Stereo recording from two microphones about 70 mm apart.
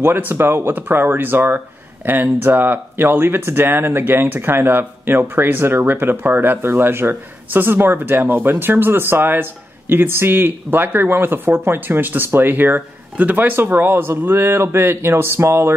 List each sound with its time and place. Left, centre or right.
0.0 s speech: right